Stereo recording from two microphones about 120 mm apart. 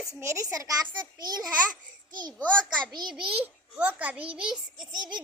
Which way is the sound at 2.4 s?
10° left (ahead or behind).